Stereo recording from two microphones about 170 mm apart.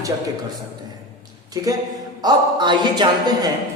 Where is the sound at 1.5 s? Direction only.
20° right (ahead or behind).